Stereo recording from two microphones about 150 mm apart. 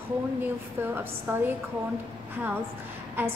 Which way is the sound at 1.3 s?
15° right (ahead or behind).